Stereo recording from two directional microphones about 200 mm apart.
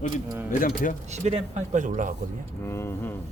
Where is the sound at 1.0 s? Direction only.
35° right (ahead or behind).